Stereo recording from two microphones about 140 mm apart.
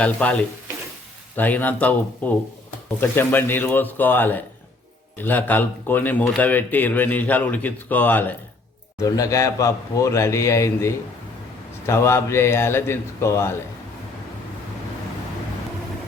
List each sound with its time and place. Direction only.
0.0 s speech: 10° left (ahead or behind)
9.0 s speech: 25° left (ahead or behind)